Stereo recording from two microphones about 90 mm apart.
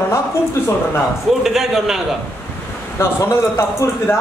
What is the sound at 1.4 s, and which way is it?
Speech, 5° right (ahead or behind).